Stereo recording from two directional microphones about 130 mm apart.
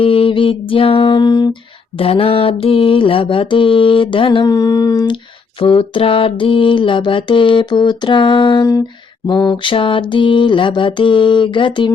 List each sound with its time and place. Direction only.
0.0 s mantra: 45° left (ahead or behind)
2.0 s mantra: 45° left (ahead or behind)
5.5 s mantra: 40° left (ahead or behind)